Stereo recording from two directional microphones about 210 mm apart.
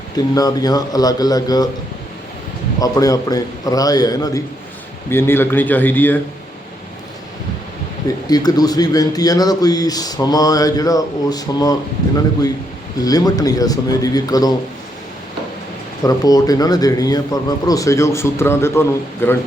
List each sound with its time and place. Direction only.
0.3 s a man's voice: 20° left (ahead or behind)
2.8 s a man's voice: 15° left (ahead or behind)
8.0 s a man's voice: 20° left (ahead or behind)
13.0 s a man's voice: 20° left (ahead or behind)
16.0 s a man's voice: 15° left (ahead or behind)